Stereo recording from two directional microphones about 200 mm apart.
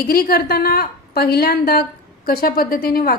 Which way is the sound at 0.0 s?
50° left (ahead or behind).